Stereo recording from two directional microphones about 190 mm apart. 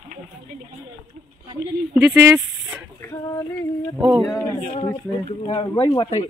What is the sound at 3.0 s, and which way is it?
Female singing, 20° left (ahead or behind).